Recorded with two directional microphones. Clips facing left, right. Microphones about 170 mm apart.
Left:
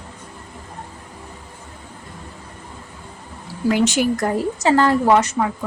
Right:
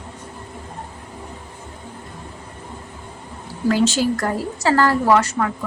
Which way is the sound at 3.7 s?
20° left (ahead or behind).